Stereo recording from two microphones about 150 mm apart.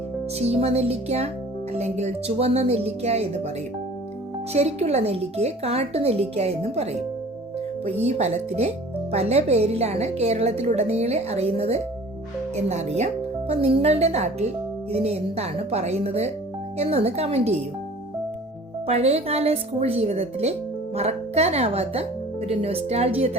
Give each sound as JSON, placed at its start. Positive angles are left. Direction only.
{"t": 0.3, "sound": "speech", "side_deg": -45}
{"t": 4.5, "sound": "speech", "side_deg": -45}
{"t": 18.9, "sound": "a woman's voice", "side_deg": -45}